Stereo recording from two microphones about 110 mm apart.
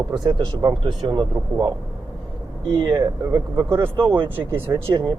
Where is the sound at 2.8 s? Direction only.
35° right (ahead or behind).